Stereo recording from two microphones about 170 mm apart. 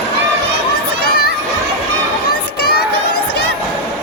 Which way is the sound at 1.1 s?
65° left (ahead or behind).